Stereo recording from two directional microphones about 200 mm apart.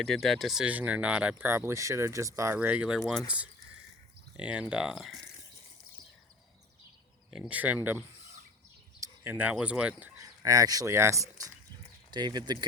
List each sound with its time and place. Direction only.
0.0 s speech: centre (ahead or behind)
7.3 s speech: 5° right (ahead or behind); by 12.6 s 20° right (ahead or behind)